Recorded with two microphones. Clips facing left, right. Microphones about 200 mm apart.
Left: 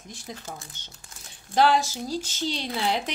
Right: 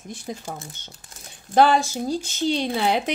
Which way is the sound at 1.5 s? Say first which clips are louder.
Right 4 dB; 55° right (ahead or behind).